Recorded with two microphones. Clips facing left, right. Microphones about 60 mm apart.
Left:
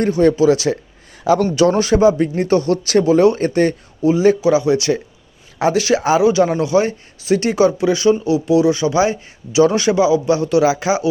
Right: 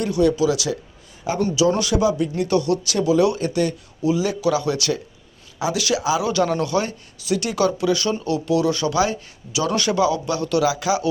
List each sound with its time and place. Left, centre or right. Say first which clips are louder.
0.0 s speech: left 5 dB; left
6.2 s speech: left 6 dB; left